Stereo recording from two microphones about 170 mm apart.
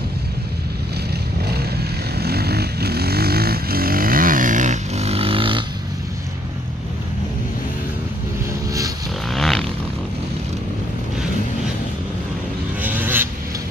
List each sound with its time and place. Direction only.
2.1 s vehicle: 70° right (ahead or behind); by 5.7 s 30° right (ahead or behind)
9.3 s vehicle: centre (ahead or behind)
12.8 s vehicle: 10° right (ahead or behind)